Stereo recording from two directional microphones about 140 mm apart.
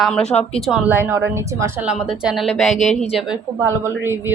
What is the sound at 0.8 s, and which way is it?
A woman's voice, 15° right (ahead or behind).